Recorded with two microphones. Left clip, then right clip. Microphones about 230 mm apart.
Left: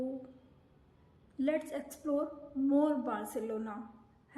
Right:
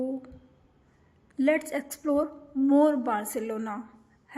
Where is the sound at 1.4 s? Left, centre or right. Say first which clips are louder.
Right 8 dB; right.